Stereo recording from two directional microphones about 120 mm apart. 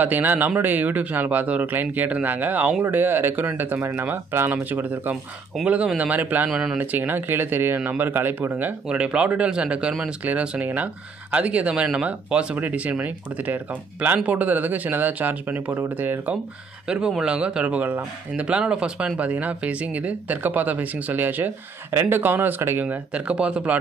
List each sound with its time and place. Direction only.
0.0 s speech: 15° right (ahead or behind)
6.8 s speech: 15° right (ahead or behind)